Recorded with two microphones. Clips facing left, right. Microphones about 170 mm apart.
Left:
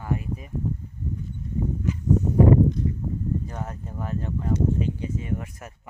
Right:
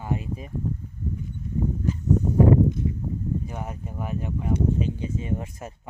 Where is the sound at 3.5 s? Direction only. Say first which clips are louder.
Even; 10° right (ahead or behind).